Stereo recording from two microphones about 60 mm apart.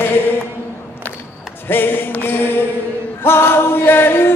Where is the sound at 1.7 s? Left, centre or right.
Left.